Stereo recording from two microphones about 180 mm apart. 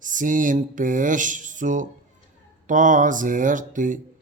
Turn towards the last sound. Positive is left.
turn(degrees=-45)  # may be behind; listen again after turning